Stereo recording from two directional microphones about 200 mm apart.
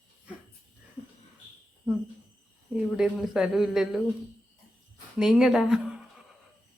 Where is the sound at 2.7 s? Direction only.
5° right (ahead or behind).